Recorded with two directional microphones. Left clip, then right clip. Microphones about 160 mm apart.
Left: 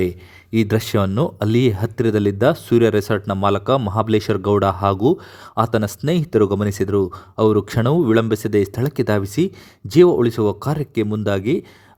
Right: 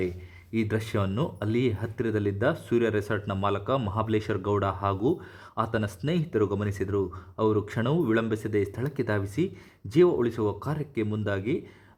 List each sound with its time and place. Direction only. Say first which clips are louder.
0.5 s speech: left 10 dB; 40° left (ahead or behind)